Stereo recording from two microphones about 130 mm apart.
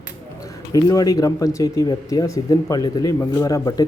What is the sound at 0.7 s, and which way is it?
Speech, 30° left (ahead or behind).